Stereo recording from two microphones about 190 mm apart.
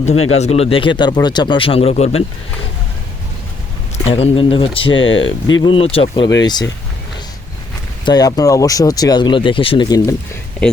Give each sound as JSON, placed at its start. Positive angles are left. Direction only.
{"t": 0.3, "sound": "speech", "side_deg": 35}
{"t": 3.9, "sound": "speech", "side_deg": 30}
{"t": 4.9, "sound": "speech", "side_deg": 90}
{"t": 5.6, "sound": "speech", "side_deg": 30}
{"t": 8.0, "sound": "speech", "side_deg": 20}